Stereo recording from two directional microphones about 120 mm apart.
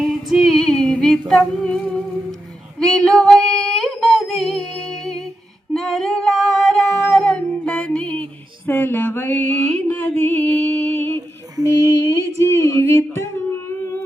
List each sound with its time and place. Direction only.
0.0 s female singing: centre (ahead or behind)
1.3 s a sound: 5° left (ahead or behind)
2.7 s female singing: 5° left (ahead or behind)
5.7 s singing: 5° left (ahead or behind)
12.1 s speech: 25° left (ahead or behind)